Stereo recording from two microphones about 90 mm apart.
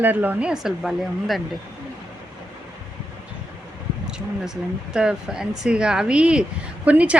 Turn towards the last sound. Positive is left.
turn(degrees=-15)  # may be behind; listen again after turning